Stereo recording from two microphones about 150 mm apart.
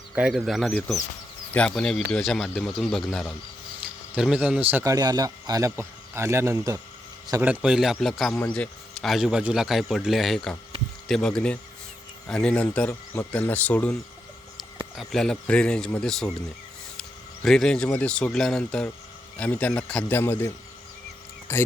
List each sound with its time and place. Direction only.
0.1 s a man's voice: 5° right (ahead or behind)
7.4 s speech: 10° right (ahead or behind); by 13.9 s 10° left (ahead or behind)
14.9 s speech: centre (ahead or behind)
17.0 s a sound: 5° left (ahead or behind)
17.8 s speech: 10° left (ahead or behind)
21.5 s speech: 15° left (ahead or behind)